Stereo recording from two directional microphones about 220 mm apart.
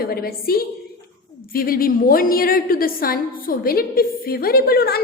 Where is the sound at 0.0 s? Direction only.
45° left (ahead or behind).